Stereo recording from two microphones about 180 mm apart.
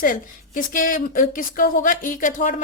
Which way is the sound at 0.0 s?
50° left (ahead or behind).